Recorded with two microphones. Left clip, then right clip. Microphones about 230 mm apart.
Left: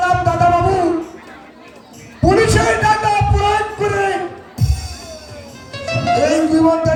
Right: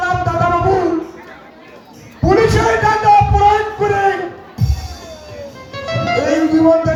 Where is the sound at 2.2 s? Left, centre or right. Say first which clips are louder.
Right 1 dB; left.